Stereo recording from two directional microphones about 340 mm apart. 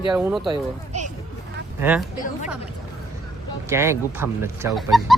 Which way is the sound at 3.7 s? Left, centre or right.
Centre.